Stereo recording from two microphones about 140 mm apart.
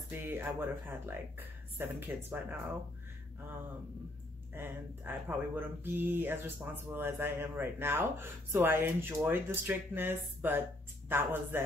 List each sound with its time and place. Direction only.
0.1 s speech: 15° right (ahead or behind)
5.1 s speech: 15° right (ahead or behind)